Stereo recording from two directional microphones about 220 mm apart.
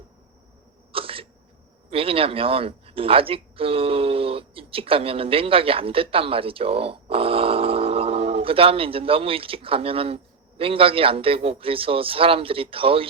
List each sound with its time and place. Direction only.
0.9 s cough: 25° right (ahead or behind)
1.9 s a man's voice: 25° right (ahead or behind)